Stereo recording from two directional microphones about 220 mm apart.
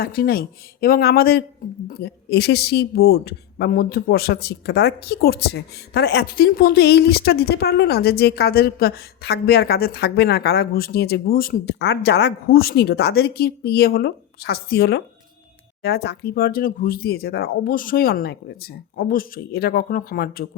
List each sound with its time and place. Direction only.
0.0 s speech: 45° left (ahead or behind)